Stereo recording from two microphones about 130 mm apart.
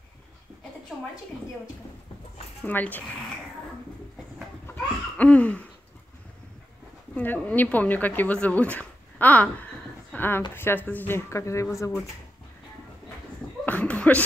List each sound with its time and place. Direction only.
2.6 s speech: 15° left (ahead or behind)
4.7 s laughter: 10° left (ahead or behind)
7.2 s speech: 10° left (ahead or behind)
13.7 s a sound: 10° left (ahead or behind)